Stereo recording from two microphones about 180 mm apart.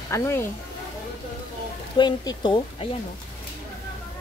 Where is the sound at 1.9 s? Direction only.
25° left (ahead or behind).